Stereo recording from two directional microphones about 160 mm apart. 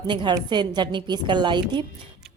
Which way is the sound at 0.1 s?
30° right (ahead or behind).